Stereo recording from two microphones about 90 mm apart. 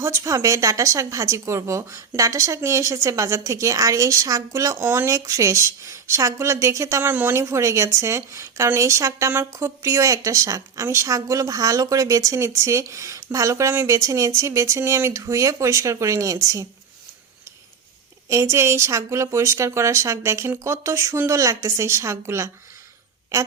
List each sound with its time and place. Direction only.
0.0 s speech: 35° right (ahead or behind)
7.1 s speech: 20° right (ahead or behind)
7.3 s speech: 35° right (ahead or behind)
18.3 s speech: 35° right (ahead or behind)